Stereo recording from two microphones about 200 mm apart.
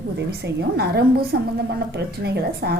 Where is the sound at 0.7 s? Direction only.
55° right (ahead or behind).